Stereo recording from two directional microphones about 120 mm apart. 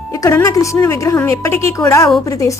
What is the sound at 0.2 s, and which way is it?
A woman's voice, 25° left (ahead or behind).